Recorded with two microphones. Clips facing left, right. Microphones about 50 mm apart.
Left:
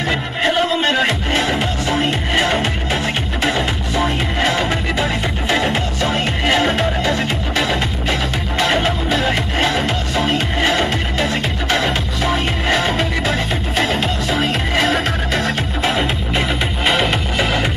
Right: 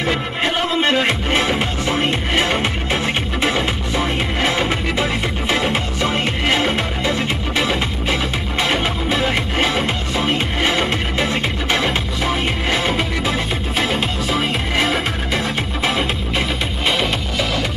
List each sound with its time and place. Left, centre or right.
0.0 s music: centre
12.7 s music: centre
16.0 s music: centre